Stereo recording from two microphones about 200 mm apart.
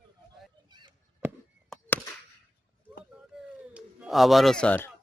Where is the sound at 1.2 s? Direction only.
10° right (ahead or behind).